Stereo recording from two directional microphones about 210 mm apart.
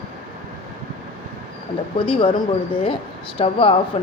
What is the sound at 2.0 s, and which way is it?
Speech, 25° left (ahead or behind).